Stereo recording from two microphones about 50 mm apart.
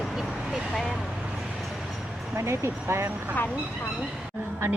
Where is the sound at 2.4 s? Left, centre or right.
Right.